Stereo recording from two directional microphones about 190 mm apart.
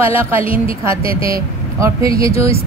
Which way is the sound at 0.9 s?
30° left (ahead or behind).